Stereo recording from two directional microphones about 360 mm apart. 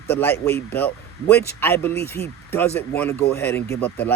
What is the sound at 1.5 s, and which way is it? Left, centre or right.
Speech, centre.